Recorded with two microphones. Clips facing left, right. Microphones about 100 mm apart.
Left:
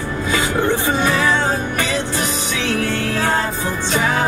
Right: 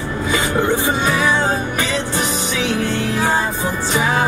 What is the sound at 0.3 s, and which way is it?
Music, 20° right (ahead or behind).